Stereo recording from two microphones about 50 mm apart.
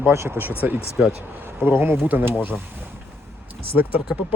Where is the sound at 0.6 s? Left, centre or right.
Right.